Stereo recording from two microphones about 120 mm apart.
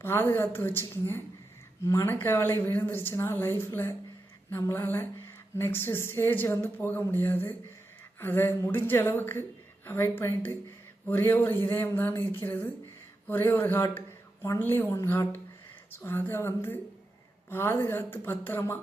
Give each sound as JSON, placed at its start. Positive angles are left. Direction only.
{"t": 0.0, "sound": "a woman's voice", "side_deg": 20}